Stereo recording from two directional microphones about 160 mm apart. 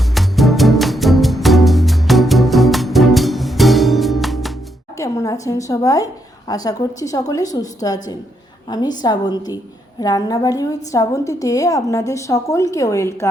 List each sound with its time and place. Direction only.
0.1 s music: centre (ahead or behind)
4.9 s a woman's voice: 20° left (ahead or behind)